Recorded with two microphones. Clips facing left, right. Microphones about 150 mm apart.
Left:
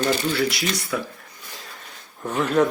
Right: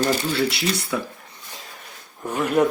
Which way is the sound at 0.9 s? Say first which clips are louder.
Right 1 dB; 20° right (ahead or behind).